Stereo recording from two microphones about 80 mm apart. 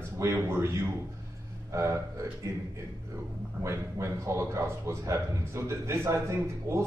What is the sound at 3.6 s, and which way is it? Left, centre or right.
A man's voice, right.